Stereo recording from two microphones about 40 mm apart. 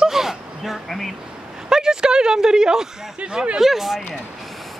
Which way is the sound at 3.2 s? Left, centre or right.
Right.